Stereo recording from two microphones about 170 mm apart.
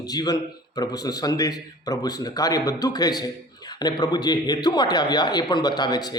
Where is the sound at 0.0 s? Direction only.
25° left (ahead or behind).